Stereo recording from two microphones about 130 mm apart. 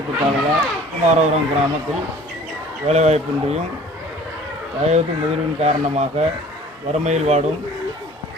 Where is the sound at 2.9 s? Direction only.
55° right (ahead or behind).